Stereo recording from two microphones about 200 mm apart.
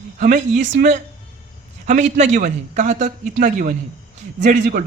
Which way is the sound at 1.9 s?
40° right (ahead or behind).